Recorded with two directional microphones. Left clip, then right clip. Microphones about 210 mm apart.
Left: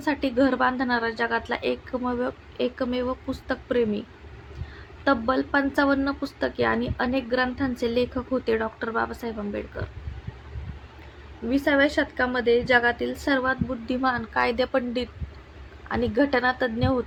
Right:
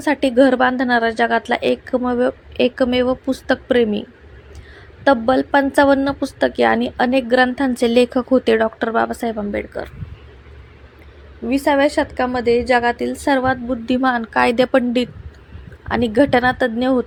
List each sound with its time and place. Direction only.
0.0 s a woman's voice: 35° right (ahead or behind)
5.0 s a woman's voice: 35° right (ahead or behind)
11.4 s a woman's voice: 30° right (ahead or behind)